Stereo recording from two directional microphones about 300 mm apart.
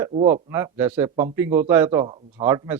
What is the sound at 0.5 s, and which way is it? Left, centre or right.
A man's voice, centre.